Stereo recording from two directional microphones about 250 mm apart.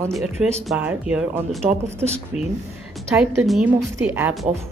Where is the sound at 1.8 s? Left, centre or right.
Right.